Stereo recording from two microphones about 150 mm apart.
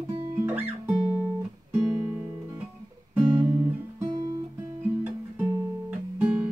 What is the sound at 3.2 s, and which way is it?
Guitar, 15° right (ahead or behind).